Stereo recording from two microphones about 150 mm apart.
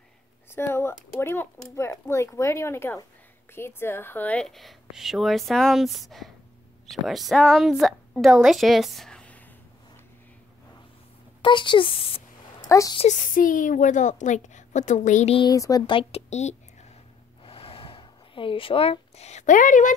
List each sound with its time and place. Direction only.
0.5 s a woman's voice: 15° left (ahead or behind)
11.4 s speech: 30° left (ahead or behind)
12.6 s speech: 20° left (ahead or behind)
12.9 s a woman's voice: 50° left (ahead or behind)
15.5 s speech: 20° left (ahead or behind)
15.9 s a woman's voice: 40° left (ahead or behind)
17.4 s a sound: 35° left (ahead or behind); by 20.0 s 60° left (ahead or behind)